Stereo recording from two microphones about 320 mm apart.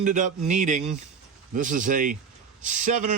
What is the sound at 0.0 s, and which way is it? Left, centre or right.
Speech, right.